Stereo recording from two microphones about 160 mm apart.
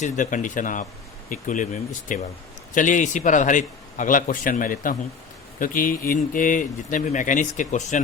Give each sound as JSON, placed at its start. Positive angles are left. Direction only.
{"t": 0.0, "sound": "speech", "side_deg": 50}